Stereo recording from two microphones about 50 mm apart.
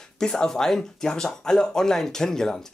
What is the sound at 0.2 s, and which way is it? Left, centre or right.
Speech, centre.